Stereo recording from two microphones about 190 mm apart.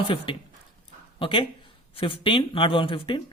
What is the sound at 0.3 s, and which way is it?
Speech, 25° left (ahead or behind).